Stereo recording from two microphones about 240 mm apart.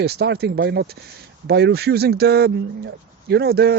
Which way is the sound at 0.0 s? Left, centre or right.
Right.